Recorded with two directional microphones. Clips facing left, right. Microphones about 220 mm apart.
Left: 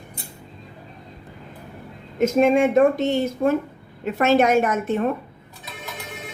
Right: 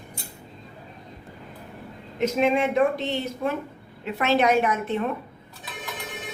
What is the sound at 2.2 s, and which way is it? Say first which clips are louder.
A woman's voice: left 5 dB; 45° left (ahead or behind).